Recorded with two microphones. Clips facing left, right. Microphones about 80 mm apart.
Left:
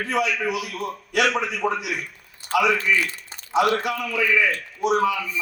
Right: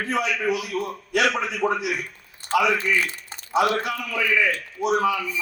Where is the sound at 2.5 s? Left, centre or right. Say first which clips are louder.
Even; right.